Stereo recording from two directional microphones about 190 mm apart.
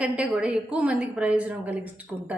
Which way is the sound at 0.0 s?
5° right (ahead or behind).